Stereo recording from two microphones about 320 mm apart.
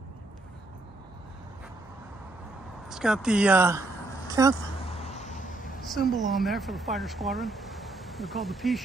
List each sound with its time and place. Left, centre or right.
2.9 s speech: centre
4.8 s vehicle: centre
5.8 s speech: centre